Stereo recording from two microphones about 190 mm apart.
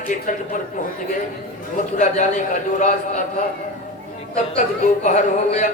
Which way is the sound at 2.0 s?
40° left (ahead or behind).